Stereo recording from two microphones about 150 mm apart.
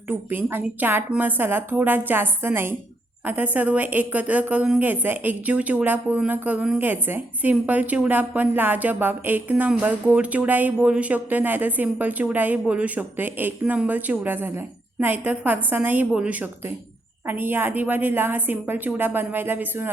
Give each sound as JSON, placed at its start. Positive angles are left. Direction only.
{"t": 0.1, "sound": "a woman's voice", "side_deg": -15}